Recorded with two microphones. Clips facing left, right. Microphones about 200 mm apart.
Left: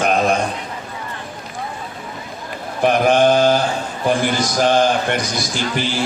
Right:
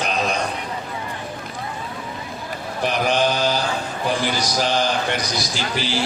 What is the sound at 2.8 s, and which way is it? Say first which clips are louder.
A man's voice: left 6 dB; 50° left (ahead or behind).